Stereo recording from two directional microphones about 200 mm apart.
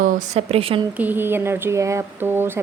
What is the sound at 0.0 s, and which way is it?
Speech, 30° right (ahead or behind).